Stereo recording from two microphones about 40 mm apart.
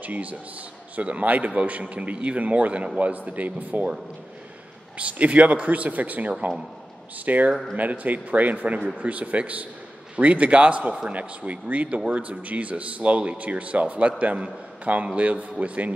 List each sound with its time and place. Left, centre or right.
0.0 s speech: right
4.9 s speech: right